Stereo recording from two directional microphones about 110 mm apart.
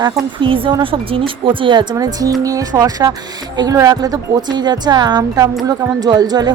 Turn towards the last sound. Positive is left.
turn(degrees=-40)  # may be behind; listen again after turning